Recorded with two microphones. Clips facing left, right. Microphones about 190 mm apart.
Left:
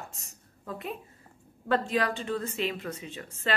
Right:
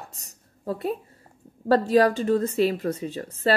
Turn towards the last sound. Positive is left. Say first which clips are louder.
# right 10 dB
turn(degrees=-40)  # may be behind; listen again after turning